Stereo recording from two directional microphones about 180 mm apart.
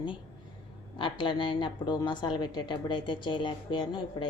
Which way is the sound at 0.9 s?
25° left (ahead or behind).